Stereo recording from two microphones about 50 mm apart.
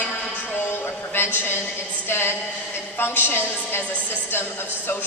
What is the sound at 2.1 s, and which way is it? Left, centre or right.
A woman's voice, left.